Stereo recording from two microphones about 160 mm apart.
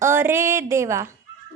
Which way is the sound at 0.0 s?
15° right (ahead or behind).